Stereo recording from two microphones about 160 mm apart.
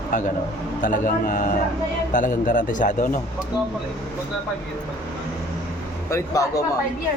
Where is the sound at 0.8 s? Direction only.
55° left (ahead or behind).